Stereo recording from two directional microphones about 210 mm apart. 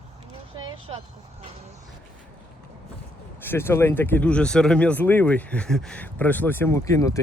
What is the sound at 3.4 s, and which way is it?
Speech, 10° left (ahead or behind).